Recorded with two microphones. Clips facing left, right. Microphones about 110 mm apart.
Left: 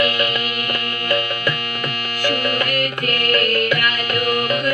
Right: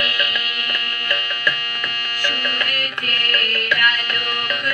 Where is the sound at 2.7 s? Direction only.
20° left (ahead or behind).